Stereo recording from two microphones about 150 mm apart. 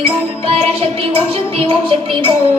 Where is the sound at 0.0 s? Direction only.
40° right (ahead or behind).